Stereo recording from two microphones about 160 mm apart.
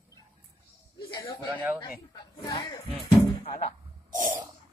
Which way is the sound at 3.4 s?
50° left (ahead or behind).